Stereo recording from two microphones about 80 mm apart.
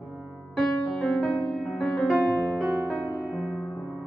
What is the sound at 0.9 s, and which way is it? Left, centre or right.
Music, centre.